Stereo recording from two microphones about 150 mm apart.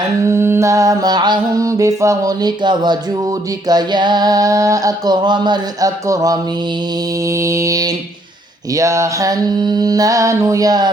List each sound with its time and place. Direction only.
0.3 s mantra: 15° right (ahead or behind)